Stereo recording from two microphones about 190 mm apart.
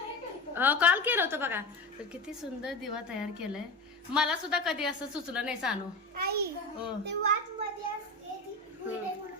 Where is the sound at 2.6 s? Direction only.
5° right (ahead or behind).